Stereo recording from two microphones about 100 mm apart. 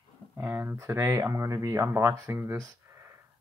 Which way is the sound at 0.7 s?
30° right (ahead or behind).